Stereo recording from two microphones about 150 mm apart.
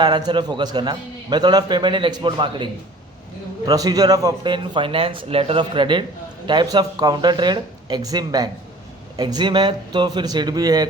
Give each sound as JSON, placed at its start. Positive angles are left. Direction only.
{"t": 0.0, "sound": "a man's voice", "side_deg": -30}
{"t": 3.7, "sound": "a man's voice", "side_deg": -25}